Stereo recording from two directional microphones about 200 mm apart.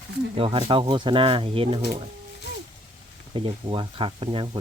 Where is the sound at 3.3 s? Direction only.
25° right (ahead or behind).